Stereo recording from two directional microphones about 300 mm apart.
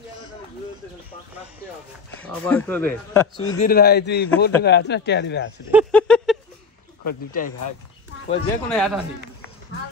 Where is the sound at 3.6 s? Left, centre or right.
Left.